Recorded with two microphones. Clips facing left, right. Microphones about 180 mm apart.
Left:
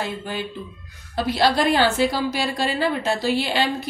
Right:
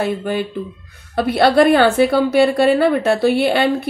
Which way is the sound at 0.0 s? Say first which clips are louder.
Right 8 dB; 60° right (ahead or behind).